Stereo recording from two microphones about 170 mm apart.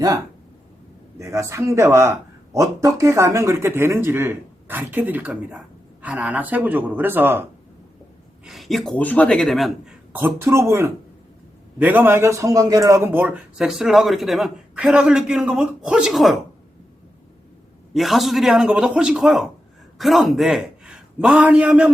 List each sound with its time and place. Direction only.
1.2 s speech: 15° right (ahead or behind)
8.4 s a man's voice: centre (ahead or behind)
10.1 s a man's voice: 15° right (ahead or behind)
17.9 s a man's voice: centre (ahead or behind)